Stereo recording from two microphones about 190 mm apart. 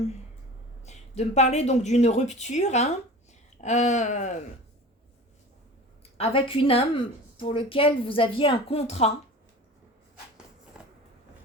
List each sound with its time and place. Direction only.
0.9 s speech: 35° left (ahead or behind)
6.1 s speech: 30° left (ahead or behind)